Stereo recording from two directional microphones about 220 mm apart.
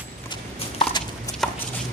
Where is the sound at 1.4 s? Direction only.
Centre (ahead or behind).